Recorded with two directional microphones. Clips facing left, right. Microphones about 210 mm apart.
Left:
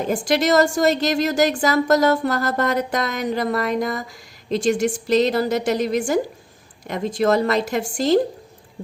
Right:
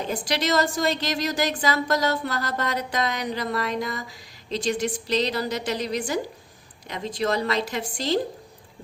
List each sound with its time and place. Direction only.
0.0 s a woman's voice: 50° left (ahead or behind)